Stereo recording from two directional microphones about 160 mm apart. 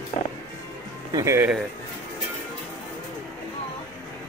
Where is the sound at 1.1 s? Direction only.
15° right (ahead or behind).